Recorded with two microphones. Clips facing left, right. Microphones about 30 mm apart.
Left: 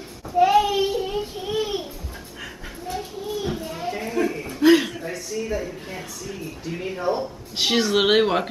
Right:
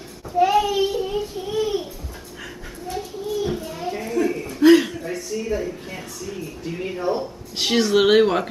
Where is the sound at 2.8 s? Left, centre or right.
Centre.